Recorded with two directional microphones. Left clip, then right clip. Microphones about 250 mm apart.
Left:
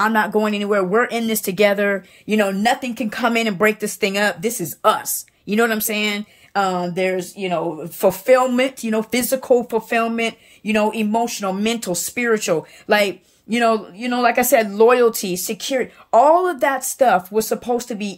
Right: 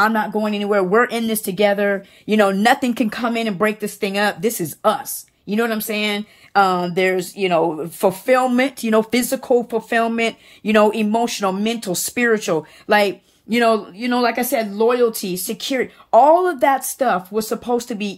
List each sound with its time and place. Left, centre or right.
0.0 s speech: centre
3.2 s speech: centre